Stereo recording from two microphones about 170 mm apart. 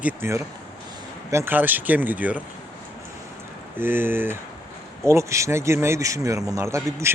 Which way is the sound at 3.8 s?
15° right (ahead or behind).